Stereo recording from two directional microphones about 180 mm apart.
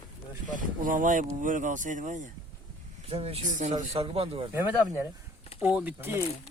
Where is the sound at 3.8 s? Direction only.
35° right (ahead or behind).